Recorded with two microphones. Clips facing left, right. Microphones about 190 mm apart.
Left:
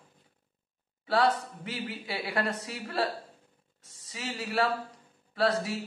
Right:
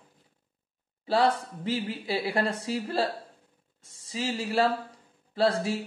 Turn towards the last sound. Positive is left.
turn(degrees=-30)  # may be behind; listen again after turning